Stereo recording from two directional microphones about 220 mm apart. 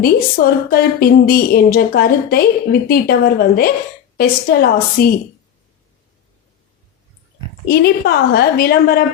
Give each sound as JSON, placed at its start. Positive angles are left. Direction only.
{"t": 0.0, "sound": "a woman's voice", "side_deg": 45}
{"t": 7.7, "sound": "a woman's voice", "side_deg": 50}